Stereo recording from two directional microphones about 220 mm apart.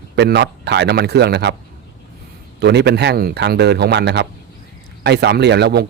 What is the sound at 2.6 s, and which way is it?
A man's voice, 50° right (ahead or behind).